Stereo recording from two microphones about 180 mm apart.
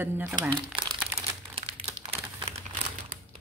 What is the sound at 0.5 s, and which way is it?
Speech, 25° right (ahead or behind).